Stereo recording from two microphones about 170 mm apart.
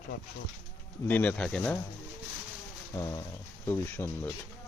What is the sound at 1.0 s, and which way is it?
Speech, 10° left (ahead or behind).